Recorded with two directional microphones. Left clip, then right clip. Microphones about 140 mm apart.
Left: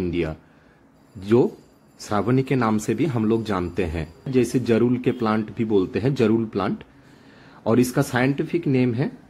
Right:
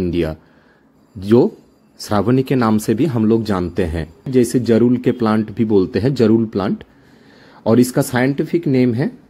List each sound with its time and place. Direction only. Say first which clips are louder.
0.1 s speech: right 6 dB; 35° right (ahead or behind)